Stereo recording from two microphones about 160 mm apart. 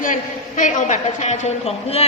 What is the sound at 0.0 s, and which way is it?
A woman's voice, 55° left (ahead or behind).